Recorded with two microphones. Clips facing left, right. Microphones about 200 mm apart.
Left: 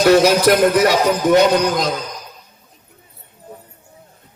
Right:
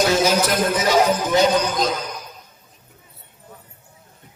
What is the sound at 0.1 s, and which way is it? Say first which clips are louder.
Speech: left 7 dB; 65° left (ahead or behind).